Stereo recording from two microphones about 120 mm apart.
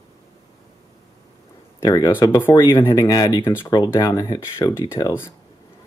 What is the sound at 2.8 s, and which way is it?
Speech, 25° left (ahead or behind).